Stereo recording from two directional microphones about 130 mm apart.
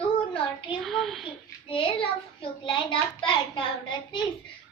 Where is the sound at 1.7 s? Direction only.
40° left (ahead or behind).